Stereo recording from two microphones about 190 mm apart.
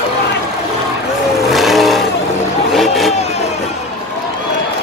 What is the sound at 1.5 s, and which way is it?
Vehicle, centre (ahead or behind).